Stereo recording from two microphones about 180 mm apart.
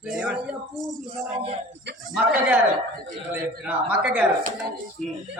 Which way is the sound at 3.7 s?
5° right (ahead or behind).